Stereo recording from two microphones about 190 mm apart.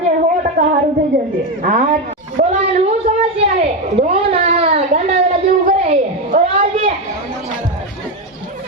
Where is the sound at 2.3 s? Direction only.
35° right (ahead or behind).